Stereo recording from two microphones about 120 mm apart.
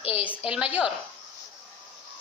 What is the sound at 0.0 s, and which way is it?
Speech, 55° left (ahead or behind).